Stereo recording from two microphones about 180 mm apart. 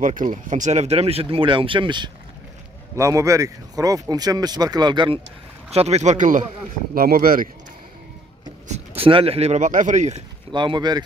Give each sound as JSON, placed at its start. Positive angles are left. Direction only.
{"t": 0.0, "sound": "speech", "side_deg": -45}
{"t": 8.6, "sound": "speech", "side_deg": -30}
{"t": 10.5, "sound": "speech", "side_deg": -25}